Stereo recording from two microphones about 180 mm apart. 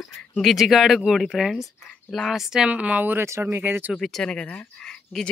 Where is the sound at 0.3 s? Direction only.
Centre (ahead or behind).